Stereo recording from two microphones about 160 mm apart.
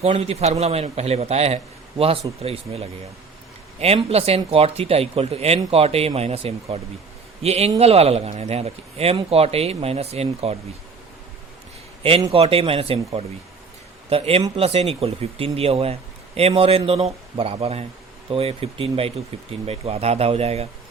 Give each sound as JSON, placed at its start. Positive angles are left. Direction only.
{"t": 0.0, "sound": "speech", "side_deg": -40}
{"t": 12.3, "sound": "speech", "side_deg": -35}
{"t": 14.1, "sound": "speech", "side_deg": -40}